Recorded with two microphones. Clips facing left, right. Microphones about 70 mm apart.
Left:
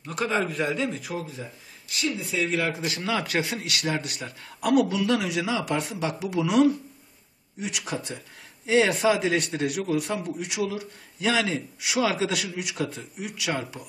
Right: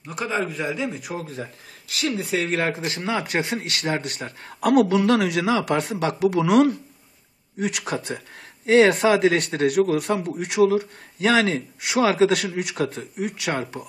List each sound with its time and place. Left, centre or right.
0.0 s a man's voice: centre
1.9 s speech: right
3.0 s speech: right
4.8 s a man's voice: right